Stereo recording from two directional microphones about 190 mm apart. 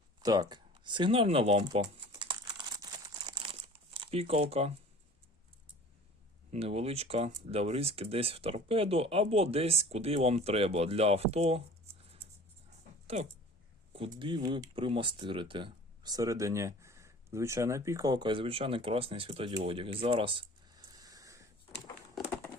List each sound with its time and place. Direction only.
0.2 s a sound: 20° right (ahead or behind)
6.5 s speech: 30° right (ahead or behind)
13.1 s speech: 35° right (ahead or behind); by 21.4 s 15° right (ahead or behind)